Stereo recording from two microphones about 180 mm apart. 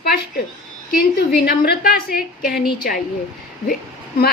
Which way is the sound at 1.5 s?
55° left (ahead or behind).